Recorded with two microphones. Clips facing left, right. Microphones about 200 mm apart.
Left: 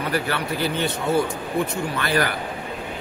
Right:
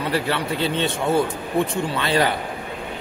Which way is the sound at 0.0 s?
25° right (ahead or behind).